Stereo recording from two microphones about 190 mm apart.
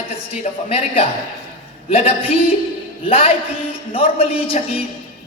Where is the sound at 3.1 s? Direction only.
30° left (ahead or behind).